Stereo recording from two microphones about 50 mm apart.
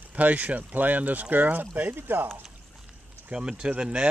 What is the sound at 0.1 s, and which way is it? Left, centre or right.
Speech, right.